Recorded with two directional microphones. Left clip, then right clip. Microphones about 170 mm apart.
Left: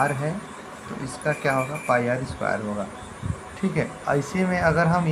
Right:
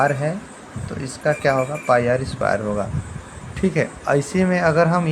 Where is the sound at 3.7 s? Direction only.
40° right (ahead or behind).